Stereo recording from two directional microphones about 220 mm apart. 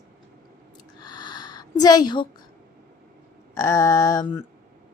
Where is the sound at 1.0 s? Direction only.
20° left (ahead or behind).